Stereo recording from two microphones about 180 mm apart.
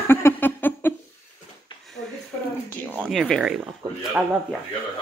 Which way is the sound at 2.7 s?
10° left (ahead or behind).